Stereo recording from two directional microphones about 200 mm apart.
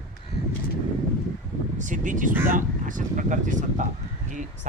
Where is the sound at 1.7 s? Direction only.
40° right (ahead or behind).